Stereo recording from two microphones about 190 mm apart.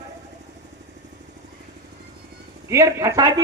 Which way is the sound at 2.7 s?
15° right (ahead or behind).